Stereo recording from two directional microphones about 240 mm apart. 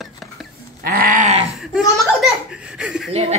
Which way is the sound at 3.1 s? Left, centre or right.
Right.